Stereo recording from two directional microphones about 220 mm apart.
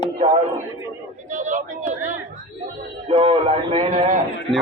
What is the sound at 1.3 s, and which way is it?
Speech, 35° right (ahead or behind).